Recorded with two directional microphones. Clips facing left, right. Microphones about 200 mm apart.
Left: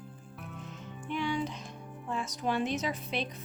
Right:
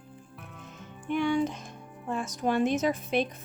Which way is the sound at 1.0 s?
50° right (ahead or behind).